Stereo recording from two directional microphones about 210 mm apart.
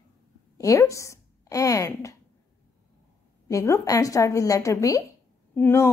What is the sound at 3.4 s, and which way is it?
A woman's voice, 15° left (ahead or behind).